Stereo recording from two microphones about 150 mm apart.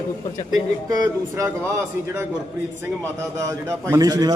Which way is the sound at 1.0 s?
20° right (ahead or behind).